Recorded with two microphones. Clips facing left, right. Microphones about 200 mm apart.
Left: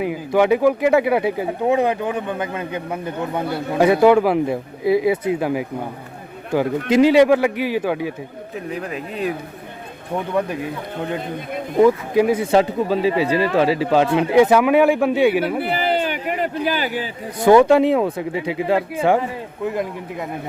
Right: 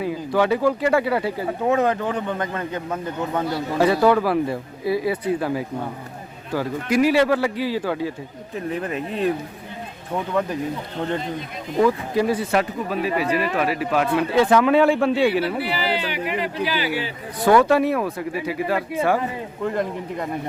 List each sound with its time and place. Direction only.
0.0 s speech: 15° left (ahead or behind)
8.5 s speech: centre (ahead or behind)
10.2 s speech: 15° left (ahead or behind)
11.8 s speech: 15° left (ahead or behind)
12.5 s speech: 25° left (ahead or behind)
14.3 s speech: 15° left (ahead or behind)
15.5 s a sound: 50° left (ahead or behind)
17.4 s speech: 20° left (ahead or behind)
19.6 s speech: 5° left (ahead or behind)